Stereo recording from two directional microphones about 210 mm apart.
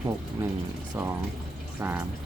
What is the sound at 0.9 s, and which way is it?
Speech, 15° right (ahead or behind).